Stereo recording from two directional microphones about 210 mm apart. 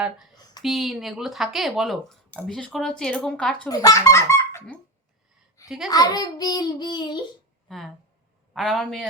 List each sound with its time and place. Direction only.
0.6 s speech: centre (ahead or behind)
3.7 s a child's voice: 15° left (ahead or behind)
5.6 s speech: centre (ahead or behind)
5.9 s a child's voice: 20° left (ahead or behind)
7.7 s speech: centre (ahead or behind)